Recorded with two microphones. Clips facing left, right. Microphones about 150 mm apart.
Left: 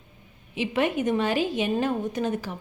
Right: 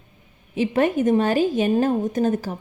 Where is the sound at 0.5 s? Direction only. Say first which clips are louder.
Right 5 dB; 45° right (ahead or behind).